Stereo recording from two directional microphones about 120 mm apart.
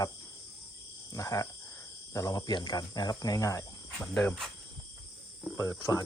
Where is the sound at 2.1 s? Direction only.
30° left (ahead or behind).